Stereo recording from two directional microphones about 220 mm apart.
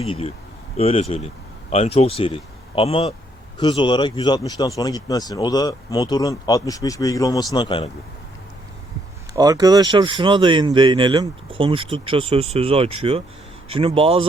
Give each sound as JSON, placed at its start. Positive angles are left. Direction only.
{"t": 0.0, "sound": "speech", "side_deg": 25}
{"t": 9.3, "sound": "speech", "side_deg": -15}